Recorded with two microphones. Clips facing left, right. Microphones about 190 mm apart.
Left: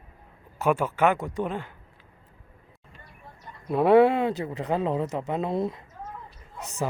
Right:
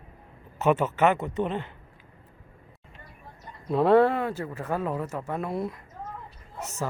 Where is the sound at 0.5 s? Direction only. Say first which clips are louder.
Right 1 dB; 10° left (ahead or behind).